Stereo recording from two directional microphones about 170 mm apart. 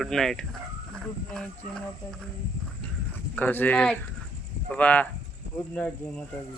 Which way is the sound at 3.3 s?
10° left (ahead or behind).